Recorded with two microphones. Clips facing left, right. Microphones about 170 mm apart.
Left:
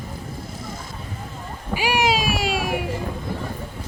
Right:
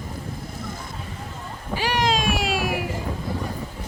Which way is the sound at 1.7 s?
10° left (ahead or behind).